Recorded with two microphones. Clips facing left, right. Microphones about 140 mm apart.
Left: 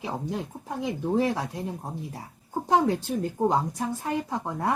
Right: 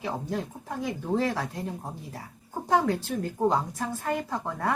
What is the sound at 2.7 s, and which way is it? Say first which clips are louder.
Speech: left 2 dB; 20° left (ahead or behind).